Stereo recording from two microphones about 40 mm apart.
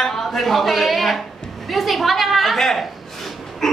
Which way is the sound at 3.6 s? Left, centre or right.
Centre.